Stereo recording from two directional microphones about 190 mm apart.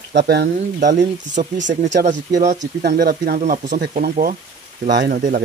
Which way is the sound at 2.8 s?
50° right (ahead or behind).